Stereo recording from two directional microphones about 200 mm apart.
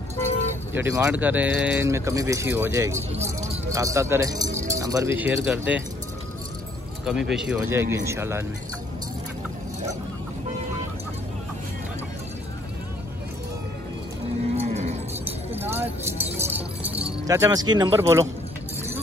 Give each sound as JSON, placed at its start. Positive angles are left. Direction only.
{"t": 0.7, "sound": "speech", "side_deg": -15}
{"t": 7.1, "sound": "speech", "side_deg": 0}
{"t": 14.6, "sound": "cattle", "side_deg": -35}
{"t": 15.5, "sound": "music", "side_deg": -10}
{"t": 17.3, "sound": "speech", "side_deg": -15}